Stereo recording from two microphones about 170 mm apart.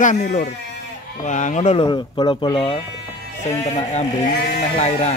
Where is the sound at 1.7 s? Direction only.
25° left (ahead or behind).